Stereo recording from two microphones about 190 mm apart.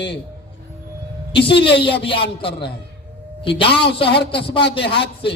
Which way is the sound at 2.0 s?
30° left (ahead or behind).